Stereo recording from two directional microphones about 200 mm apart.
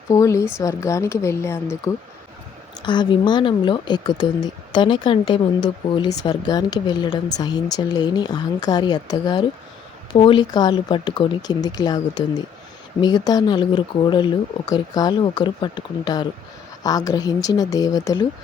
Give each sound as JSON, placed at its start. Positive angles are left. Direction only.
{"t": 0.1, "sound": "speech", "side_deg": 15}